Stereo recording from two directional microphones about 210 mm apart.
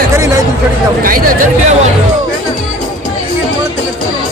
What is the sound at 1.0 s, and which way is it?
Speech, 40° right (ahead or behind).